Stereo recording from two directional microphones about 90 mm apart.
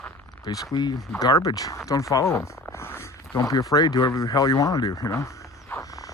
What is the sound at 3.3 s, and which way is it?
Speech, 40° left (ahead or behind).